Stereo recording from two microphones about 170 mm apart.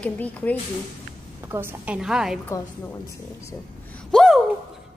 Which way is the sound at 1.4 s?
15° right (ahead or behind).